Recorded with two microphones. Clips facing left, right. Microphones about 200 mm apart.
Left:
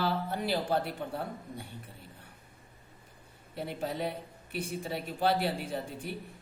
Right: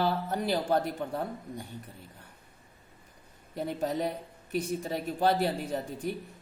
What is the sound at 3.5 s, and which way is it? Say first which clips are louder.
Speech: right 4 dB; 40° right (ahead or behind).